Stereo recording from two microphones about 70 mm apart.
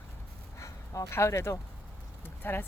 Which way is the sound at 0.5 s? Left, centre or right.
Left.